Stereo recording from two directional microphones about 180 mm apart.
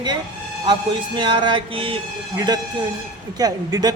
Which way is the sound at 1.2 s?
25° right (ahead or behind).